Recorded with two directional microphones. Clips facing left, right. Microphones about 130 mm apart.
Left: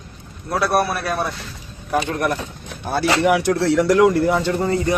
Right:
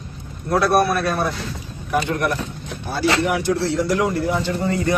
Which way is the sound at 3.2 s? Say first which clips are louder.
Left 3 dB; 65° left (ahead or behind).